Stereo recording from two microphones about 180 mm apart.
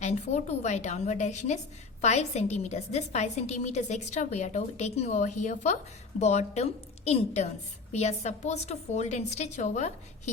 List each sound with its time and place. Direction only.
0.0 s a woman's voice: 40° left (ahead or behind)